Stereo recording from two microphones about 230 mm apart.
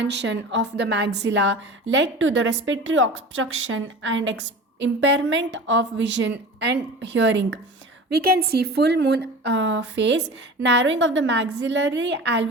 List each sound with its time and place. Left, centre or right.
0.0 s a woman's voice: right